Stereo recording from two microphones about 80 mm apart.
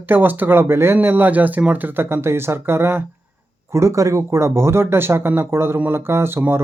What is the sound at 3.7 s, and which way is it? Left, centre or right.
Speech, right.